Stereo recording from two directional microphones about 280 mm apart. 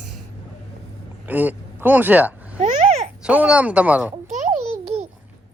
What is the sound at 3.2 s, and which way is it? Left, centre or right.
Speech, centre.